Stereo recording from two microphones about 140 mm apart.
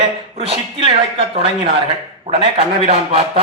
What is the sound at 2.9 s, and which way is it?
Speech, 45° right (ahead or behind).